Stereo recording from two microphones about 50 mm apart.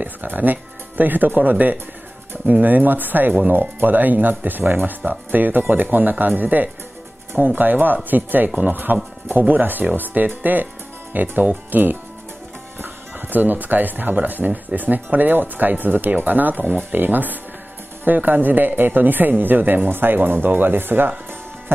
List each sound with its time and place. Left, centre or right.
0.0 s speech: right